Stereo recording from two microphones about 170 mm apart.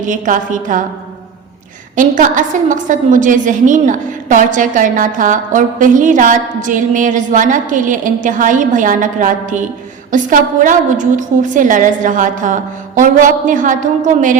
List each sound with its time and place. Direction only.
0.0 s a woman's voice: 50° right (ahead or behind)
2.0 s a woman's voice: 50° right (ahead or behind)